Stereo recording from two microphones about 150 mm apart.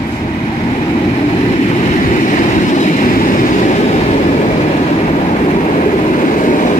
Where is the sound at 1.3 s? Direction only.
45° left (ahead or behind).